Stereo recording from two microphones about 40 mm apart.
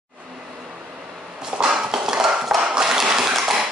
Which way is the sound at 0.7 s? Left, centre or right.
Right.